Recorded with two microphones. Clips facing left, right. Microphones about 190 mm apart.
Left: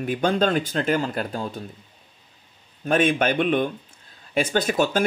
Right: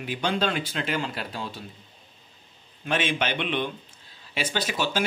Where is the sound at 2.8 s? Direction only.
50° left (ahead or behind).